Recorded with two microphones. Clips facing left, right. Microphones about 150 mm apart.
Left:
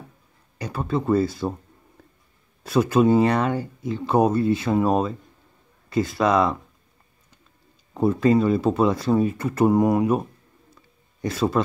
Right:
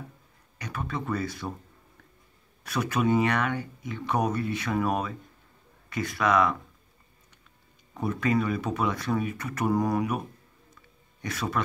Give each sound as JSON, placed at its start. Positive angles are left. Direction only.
{"t": 0.6, "sound": "speech", "side_deg": 30}
{"t": 2.6, "sound": "speech", "side_deg": 30}
{"t": 7.9, "sound": "speech", "side_deg": 30}
{"t": 11.2, "sound": "speech", "side_deg": 30}